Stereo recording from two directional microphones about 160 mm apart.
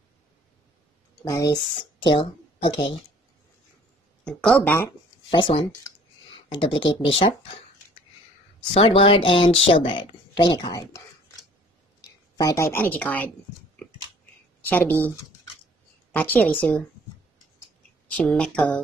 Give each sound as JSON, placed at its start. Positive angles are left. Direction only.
{"t": 1.2, "sound": "speech", "side_deg": 20}
{"t": 2.0, "sound": "speech", "side_deg": 30}
{"t": 4.2, "sound": "speech", "side_deg": 5}
{"t": 5.3, "sound": "speech", "side_deg": 35}
{"t": 8.7, "sound": "speech", "side_deg": 35}
{"t": 12.4, "sound": "a woman's voice", "side_deg": 20}
{"t": 14.7, "sound": "a woman's voice", "side_deg": 10}
{"t": 18.1, "sound": "a woman's voice", "side_deg": 10}